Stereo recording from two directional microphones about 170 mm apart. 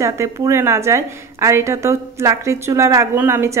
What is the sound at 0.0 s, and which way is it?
A woman's voice, 15° right (ahead or behind).